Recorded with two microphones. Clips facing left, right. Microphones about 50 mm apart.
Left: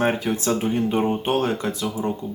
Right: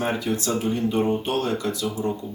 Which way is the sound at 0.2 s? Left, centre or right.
Left.